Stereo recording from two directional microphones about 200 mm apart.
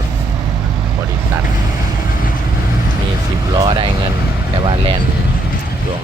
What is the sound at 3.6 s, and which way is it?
Vehicle, 25° right (ahead or behind).